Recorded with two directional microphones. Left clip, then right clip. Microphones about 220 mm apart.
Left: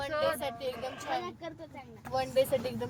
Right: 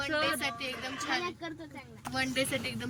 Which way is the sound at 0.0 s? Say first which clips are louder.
Right 1 dB; 15° left (ahead or behind).